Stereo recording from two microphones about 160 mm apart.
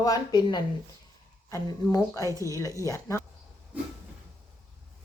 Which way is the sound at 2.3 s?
20° right (ahead or behind).